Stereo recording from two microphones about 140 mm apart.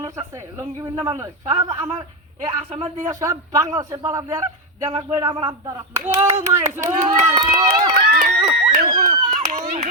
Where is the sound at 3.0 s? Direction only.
25° right (ahead or behind).